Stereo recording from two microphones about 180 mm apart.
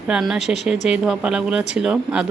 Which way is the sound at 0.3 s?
40° left (ahead or behind).